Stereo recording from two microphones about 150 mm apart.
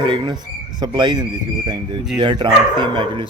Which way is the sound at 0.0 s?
30° right (ahead or behind).